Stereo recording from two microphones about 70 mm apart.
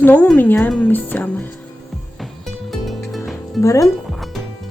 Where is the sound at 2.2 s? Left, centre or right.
Centre.